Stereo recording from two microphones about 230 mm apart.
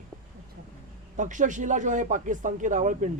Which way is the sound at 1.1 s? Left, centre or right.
Right.